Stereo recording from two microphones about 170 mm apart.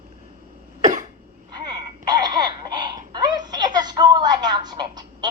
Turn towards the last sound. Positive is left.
turn(degrees=-25)  # may be behind; listen again after turning